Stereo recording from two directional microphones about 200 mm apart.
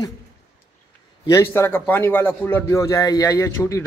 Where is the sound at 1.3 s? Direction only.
15° left (ahead or behind).